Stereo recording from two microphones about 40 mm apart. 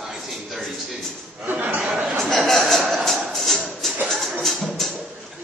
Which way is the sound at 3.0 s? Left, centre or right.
Centre.